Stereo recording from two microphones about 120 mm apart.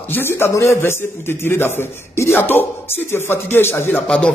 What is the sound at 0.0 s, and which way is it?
A man's voice, 20° left (ahead or behind).